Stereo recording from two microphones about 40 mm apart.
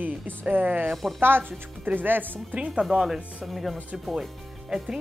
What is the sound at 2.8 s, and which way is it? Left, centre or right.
A woman's voice, centre.